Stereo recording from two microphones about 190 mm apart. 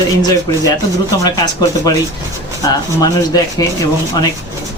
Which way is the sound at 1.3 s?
20° left (ahead or behind).